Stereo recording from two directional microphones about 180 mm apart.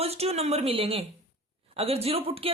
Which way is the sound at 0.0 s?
35° right (ahead or behind).